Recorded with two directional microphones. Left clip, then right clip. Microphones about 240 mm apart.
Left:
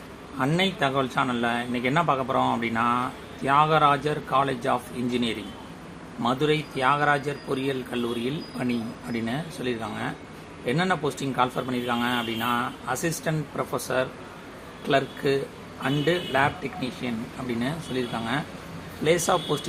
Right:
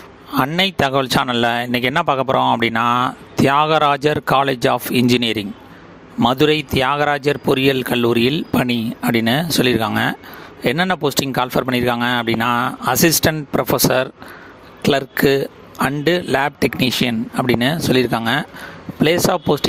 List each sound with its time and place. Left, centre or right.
0.3 s speech: right